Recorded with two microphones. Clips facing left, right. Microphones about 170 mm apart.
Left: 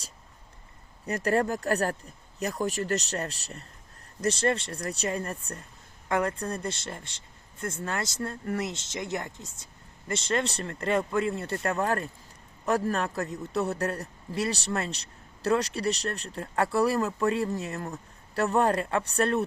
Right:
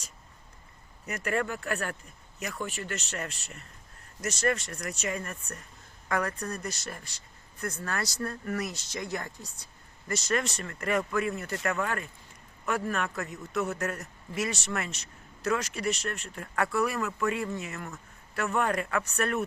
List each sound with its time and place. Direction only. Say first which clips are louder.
1.0 s a man's voice: left 5 dB; 35° left (ahead or behind)